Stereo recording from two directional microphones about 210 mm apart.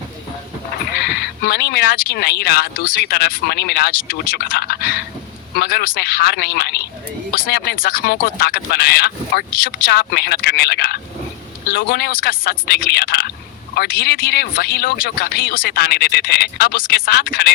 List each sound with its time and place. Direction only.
0.9 s speech: 50° left (ahead or behind)